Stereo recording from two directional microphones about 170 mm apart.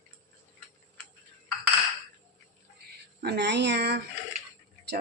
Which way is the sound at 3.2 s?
80° right.